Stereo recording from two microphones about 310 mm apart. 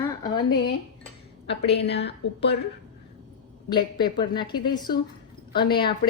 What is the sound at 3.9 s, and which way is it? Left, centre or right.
Speech, centre.